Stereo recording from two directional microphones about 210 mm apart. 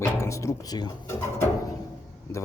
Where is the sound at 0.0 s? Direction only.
15° left (ahead or behind).